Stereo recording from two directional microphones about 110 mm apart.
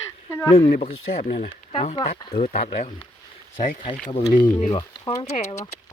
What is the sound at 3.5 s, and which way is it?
Speech, 50° left (ahead or behind).